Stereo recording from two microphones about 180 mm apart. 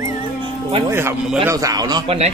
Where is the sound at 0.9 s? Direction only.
15° right (ahead or behind).